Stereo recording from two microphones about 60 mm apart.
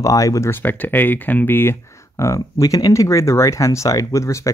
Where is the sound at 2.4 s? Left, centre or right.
Left.